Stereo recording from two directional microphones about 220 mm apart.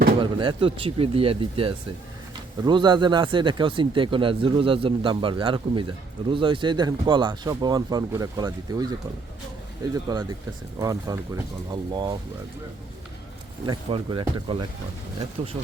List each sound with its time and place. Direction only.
0.2 s speech: 20° right (ahead or behind)
13.7 s speech: 25° right (ahead or behind)